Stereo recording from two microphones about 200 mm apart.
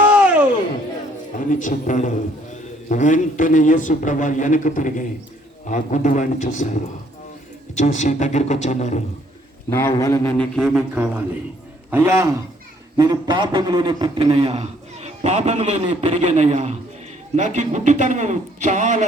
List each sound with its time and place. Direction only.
0.1 s a sound: 5° right (ahead or behind)
1.5 s a man's voice: 40° left (ahead or behind)
7.8 s a man's voice: 35° left (ahead or behind)
9.6 s a man's voice: 15° left (ahead or behind)
10.3 s a man's voice: centre (ahead or behind)
13.0 s a man's voice: 20° right (ahead or behind); by 19.0 s 35° right (ahead or behind)